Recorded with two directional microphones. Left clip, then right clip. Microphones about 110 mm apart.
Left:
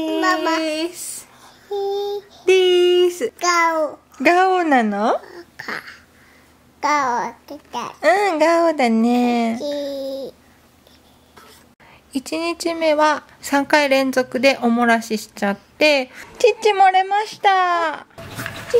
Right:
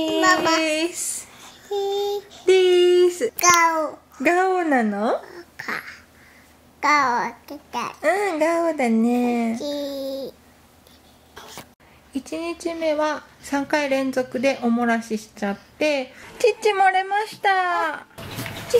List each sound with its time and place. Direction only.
0.7 s speech: 30° left (ahead or behind)
1.4 s child singing: 5° left (ahead or behind)
2.4 s a sound: 30° left (ahead or behind)
3.3 s speech: 5° left (ahead or behind)
4.2 s a woman's voice: 30° left (ahead or behind)
5.2 s a sound: 10° left (ahead or behind)
6.8 s a child's voice: 5° left (ahead or behind)
8.0 s a woman's voice: 30° left (ahead or behind)
9.6 s speech: centre (ahead or behind)
12.1 s a woman's voice: 45° left (ahead or behind)
16.3 s a woman's voice: 30° left (ahead or behind)